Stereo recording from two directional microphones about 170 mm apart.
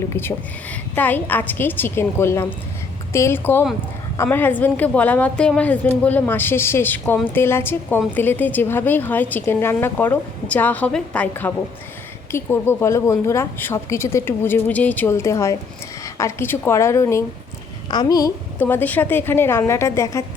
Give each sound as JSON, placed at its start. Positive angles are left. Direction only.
{"t": 0.2, "sound": "a woman's voice", "side_deg": 10}